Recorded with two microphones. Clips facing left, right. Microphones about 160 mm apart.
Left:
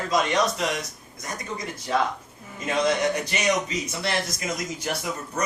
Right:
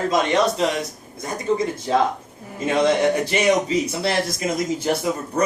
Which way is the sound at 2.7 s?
30° right (ahead or behind).